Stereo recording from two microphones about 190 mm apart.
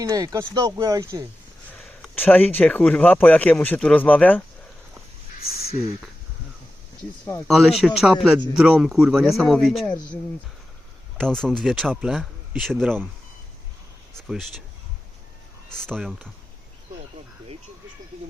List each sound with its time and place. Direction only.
0.0 s speech: 15° right (ahead or behind)
1.7 s speech: 5° left (ahead or behind)
7.4 s speech: centre (ahead or behind)
11.2 s speech: 5° left (ahead or behind)
14.2 s speech: centre (ahead or behind)
15.7 s speech: 5° left (ahead or behind)